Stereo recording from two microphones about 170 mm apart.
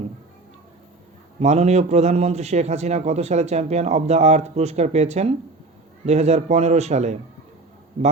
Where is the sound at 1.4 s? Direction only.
40° right (ahead or behind).